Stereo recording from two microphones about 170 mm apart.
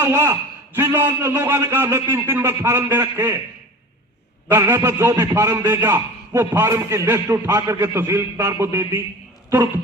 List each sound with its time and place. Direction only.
0.0 s a man's voice: 15° right (ahead or behind)
4.4 s a man's voice: 15° right (ahead or behind)